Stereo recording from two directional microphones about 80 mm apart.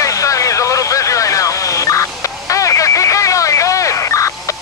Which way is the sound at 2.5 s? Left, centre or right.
Left.